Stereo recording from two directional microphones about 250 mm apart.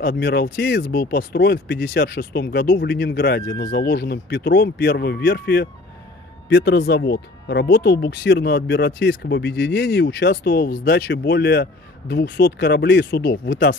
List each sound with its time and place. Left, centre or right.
0.0 s speech: left